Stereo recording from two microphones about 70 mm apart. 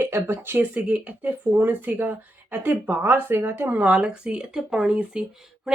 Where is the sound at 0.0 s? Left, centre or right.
Right.